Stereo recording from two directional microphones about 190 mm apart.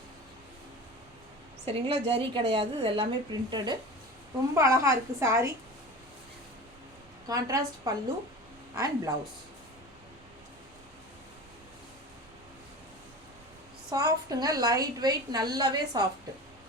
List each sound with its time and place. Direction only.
1.6 s a woman's voice: 30° right (ahead or behind)
7.3 s a woman's voice: 20° right (ahead or behind)
13.9 s a woman's voice: 20° right (ahead or behind)